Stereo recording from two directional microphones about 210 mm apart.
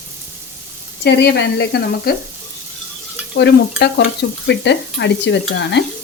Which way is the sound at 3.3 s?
55° left (ahead or behind).